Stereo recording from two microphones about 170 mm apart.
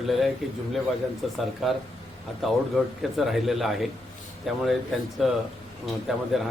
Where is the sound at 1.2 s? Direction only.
Centre (ahead or behind).